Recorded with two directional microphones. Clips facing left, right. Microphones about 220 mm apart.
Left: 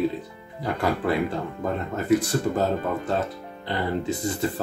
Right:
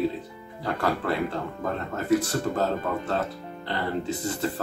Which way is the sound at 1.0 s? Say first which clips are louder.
Left 6 dB; 15° left (ahead or behind).